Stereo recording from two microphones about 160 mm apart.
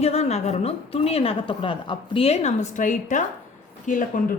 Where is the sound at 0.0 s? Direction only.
40° left (ahead or behind).